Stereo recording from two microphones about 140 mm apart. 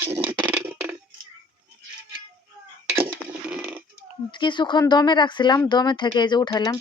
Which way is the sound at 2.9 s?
10° right (ahead or behind).